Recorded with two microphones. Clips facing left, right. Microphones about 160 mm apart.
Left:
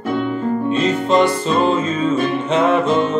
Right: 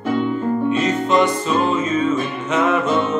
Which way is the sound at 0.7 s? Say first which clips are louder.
Left 3 dB; 30° left (ahead or behind).